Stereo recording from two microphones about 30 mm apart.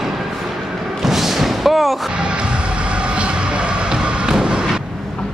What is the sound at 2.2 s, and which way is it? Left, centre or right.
Train, right.